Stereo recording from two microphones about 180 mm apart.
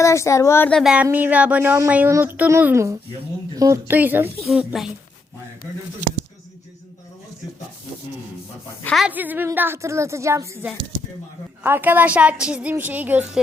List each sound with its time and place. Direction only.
0.0 s speech: 15° left (ahead or behind)
0.8 s a woman's voice: 5° right (ahead or behind)
8.8 s a woman's voice: 5° left (ahead or behind)
9.0 s speech: 10° right (ahead or behind)